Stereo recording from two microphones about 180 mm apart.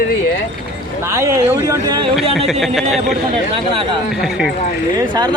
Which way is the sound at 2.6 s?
Centre (ahead or behind).